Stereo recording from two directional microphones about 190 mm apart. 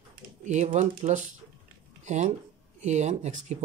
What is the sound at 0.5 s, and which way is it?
Speech, 40° right (ahead or behind).